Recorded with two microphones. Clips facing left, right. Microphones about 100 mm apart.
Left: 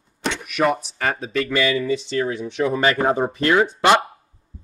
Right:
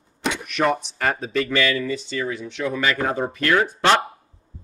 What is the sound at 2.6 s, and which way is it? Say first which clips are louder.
Speech: left 4 dB; 30° left (ahead or behind).